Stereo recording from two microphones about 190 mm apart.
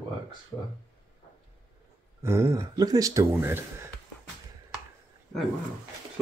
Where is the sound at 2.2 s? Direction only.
15° right (ahead or behind).